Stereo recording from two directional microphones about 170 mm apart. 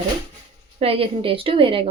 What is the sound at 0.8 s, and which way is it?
Speech, 35° right (ahead or behind).